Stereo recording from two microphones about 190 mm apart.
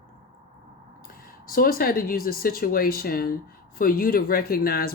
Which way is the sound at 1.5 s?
50° left (ahead or behind).